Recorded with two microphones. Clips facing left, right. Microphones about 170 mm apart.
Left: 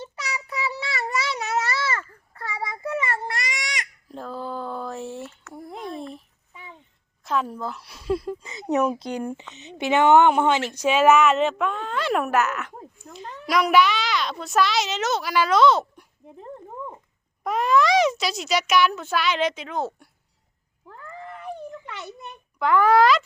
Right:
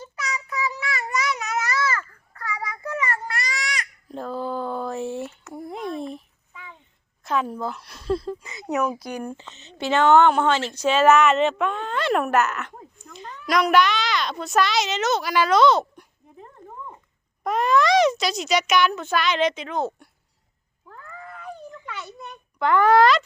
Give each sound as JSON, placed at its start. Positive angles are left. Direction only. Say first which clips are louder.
{"t": 0.0, "sound": "child singing", "louder": "right 1 dB", "side_deg": 30}
{"t": 4.1, "sound": "a sound", "louder": "right 4 dB", "side_deg": 0}
{"t": 6.5, "sound": "a sound", "louder": "even", "side_deg": 25}
{"t": 7.3, "sound": "a child's voice", "louder": "right 1 dB", "side_deg": 0}
{"t": 9.0, "sound": "a child's voice", "louder": "left 2 dB", "side_deg": 25}
{"t": 17.4, "sound": "a child's voice", "louder": "even", "side_deg": 5}
{"t": 22.5, "sound": "a child's voice", "louder": "right 1 dB", "side_deg": 5}